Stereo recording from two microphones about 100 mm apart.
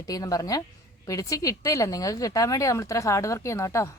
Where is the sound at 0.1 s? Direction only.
35° left (ahead or behind).